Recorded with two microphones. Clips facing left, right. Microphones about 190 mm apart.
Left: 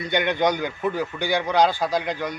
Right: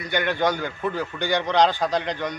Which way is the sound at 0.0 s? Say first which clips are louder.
Left 2 dB; 20° left (ahead or behind).